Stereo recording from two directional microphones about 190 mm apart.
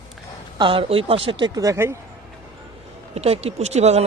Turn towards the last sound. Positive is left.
turn(degrees=-35)  # may be behind; listen again after turning